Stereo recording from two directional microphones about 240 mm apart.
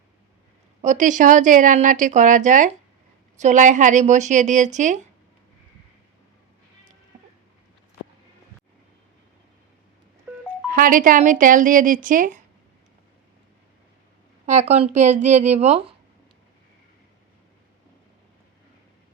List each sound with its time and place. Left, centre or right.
0.8 s speech: right
10.3 s music: centre
10.7 s speech: right
14.4 s a woman's voice: right